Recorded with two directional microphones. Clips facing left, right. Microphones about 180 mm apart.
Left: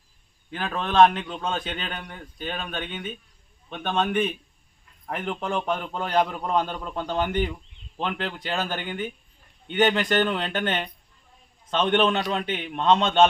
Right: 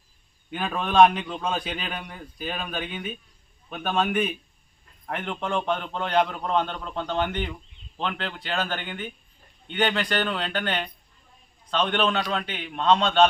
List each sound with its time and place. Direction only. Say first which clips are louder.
0.5 s a man's voice: right 1 dB; 10° right (ahead or behind); by 13.2 s 20° left (ahead or behind)